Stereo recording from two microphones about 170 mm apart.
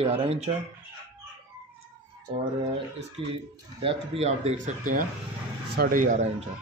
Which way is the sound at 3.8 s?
35° right (ahead or behind).